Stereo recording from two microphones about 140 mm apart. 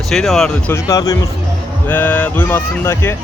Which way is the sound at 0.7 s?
25° left (ahead or behind).